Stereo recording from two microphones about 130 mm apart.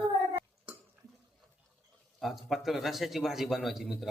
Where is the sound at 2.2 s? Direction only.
Centre (ahead or behind).